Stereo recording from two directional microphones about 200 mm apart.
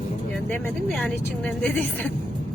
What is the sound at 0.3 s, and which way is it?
A woman's voice, 5° left (ahead or behind).